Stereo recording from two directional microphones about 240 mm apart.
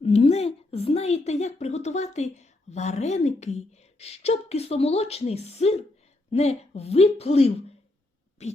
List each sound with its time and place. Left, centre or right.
0.0 s a woman's voice: left